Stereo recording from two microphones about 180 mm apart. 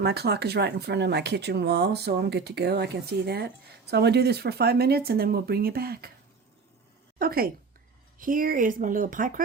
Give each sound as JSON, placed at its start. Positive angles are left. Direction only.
{"t": 0.0, "sound": "speech", "side_deg": -65}
{"t": 7.2, "sound": "speech", "side_deg": -55}